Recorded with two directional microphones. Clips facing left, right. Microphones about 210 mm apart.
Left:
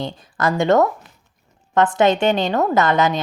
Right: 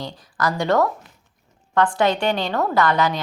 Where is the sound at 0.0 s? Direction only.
25° left (ahead or behind).